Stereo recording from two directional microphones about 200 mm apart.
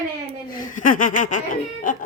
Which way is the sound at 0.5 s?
40° left (ahead or behind).